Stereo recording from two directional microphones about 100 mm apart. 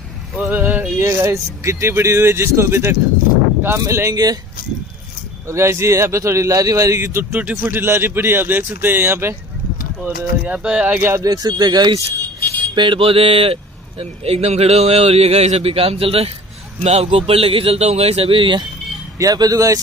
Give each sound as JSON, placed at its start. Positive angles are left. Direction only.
{"t": 0.5, "sound": "music", "side_deg": -20}
{"t": 1.0, "sound": "a man's voice", "side_deg": -30}
{"t": 5.5, "sound": "a man's voice", "side_deg": -30}
{"t": 11.0, "sound": "a man's voice", "side_deg": -25}
{"t": 11.2, "sound": "speech", "side_deg": -40}
{"t": 12.4, "sound": "a sound", "side_deg": 15}
{"t": 12.7, "sound": "a man's voice", "side_deg": -55}
{"t": 16.8, "sound": "a man's voice", "side_deg": -90}
{"t": 19.1, "sound": "speech", "side_deg": -35}